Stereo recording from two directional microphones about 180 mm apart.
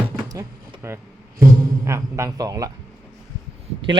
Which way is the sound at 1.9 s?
15° right (ahead or behind).